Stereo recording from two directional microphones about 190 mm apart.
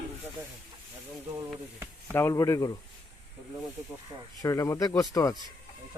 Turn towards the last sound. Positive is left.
turn(degrees=20)  # may be behind; listen again after turning